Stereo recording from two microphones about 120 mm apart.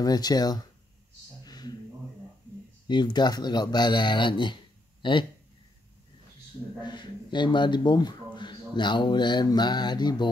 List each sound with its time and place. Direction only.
0.0 s speech: 35° left (ahead or behind)
1.4 s a sound: 35° left (ahead or behind)
2.9 s speech: 40° left (ahead or behind)
6.8 s speech: 40° left (ahead or behind)